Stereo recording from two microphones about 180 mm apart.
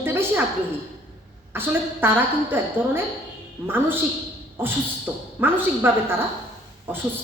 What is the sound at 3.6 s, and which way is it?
A woman's voice, 10° right (ahead or behind).